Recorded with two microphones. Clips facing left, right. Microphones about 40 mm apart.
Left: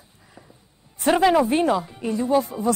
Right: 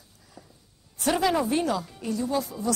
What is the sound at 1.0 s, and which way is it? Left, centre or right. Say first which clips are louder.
Speech: left 6 dB; left.